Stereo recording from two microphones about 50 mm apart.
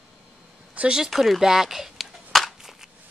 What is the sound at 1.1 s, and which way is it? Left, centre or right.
Speech, centre.